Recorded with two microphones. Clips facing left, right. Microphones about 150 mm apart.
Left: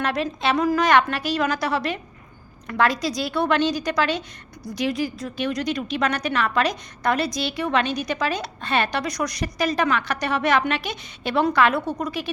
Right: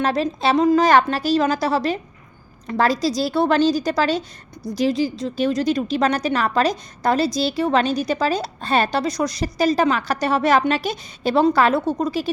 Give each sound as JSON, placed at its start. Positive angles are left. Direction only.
{"t": 0.0, "sound": "a woman's voice", "side_deg": -35}